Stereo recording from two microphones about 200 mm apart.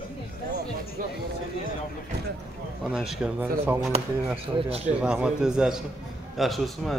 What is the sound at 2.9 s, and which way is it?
Speech, 5° right (ahead or behind).